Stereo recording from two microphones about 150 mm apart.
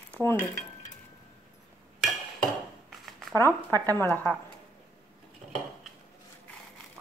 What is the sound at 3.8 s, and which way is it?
Speech, 10° left (ahead or behind).